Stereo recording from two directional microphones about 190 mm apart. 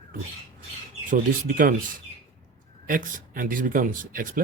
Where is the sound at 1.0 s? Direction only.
45° right (ahead or behind).